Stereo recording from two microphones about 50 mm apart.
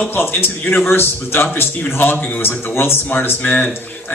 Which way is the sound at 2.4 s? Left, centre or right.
Left.